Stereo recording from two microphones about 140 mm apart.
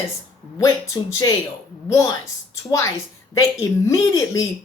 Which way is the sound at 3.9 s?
20° left (ahead or behind).